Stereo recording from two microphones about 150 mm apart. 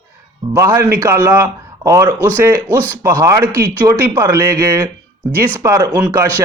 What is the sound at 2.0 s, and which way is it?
Speech, 15° left (ahead or behind).